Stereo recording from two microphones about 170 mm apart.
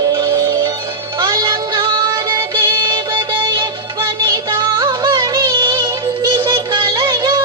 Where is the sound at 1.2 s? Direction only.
20° right (ahead or behind).